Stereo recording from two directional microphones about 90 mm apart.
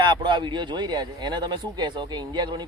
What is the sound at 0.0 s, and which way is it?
Speech, 60° right (ahead or behind).